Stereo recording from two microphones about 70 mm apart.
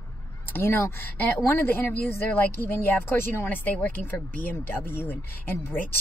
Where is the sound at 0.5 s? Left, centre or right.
Left.